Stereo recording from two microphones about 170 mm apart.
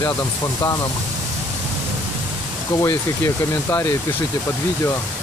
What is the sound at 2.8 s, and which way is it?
Speech, 15° left (ahead or behind).